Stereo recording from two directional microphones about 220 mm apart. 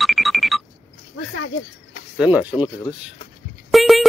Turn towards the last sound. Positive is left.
turn(degrees=0)  # may be behind; listen again after turning